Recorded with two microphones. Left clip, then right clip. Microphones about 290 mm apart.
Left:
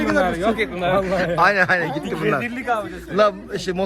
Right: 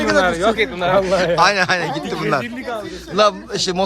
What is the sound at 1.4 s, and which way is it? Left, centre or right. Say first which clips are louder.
A man's voice: left 2 dB; centre.